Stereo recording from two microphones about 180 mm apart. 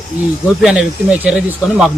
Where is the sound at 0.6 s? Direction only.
5° right (ahead or behind).